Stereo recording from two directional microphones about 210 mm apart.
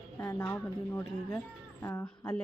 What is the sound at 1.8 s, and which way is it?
Speech, 15° left (ahead or behind).